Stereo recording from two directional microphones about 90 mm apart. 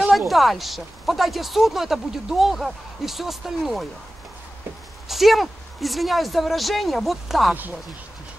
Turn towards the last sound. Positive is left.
turn(degrees=0)  # may be behind; listen again after turning